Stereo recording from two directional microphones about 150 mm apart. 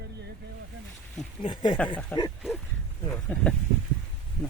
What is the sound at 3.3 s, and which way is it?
Speech, 10° left (ahead or behind).